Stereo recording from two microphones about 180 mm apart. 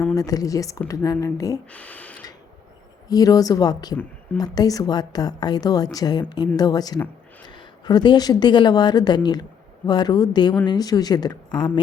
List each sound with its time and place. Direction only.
0.2 s a woman's voice: 20° left (ahead or behind)
1.7 s a sound: 10° left (ahead or behind)
3.1 s a woman's voice: 20° left (ahead or behind)